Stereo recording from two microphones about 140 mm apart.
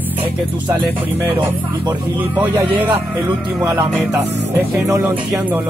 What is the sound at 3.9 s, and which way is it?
Music, 15° right (ahead or behind).